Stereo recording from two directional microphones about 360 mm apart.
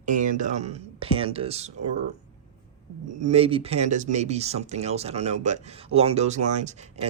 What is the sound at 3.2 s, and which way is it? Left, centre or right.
Speech, centre.